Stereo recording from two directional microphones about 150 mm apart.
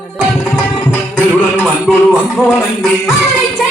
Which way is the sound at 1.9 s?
5° right (ahead or behind).